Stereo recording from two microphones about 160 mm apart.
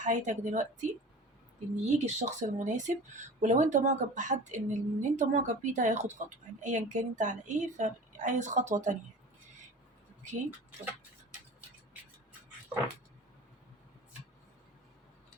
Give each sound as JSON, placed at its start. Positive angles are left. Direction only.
{"t": 0.0, "sound": "speech", "side_deg": -50}